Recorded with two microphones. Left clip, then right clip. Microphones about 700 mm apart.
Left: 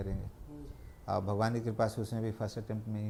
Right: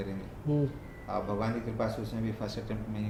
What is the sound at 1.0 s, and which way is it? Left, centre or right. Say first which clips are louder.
Speech: even; left.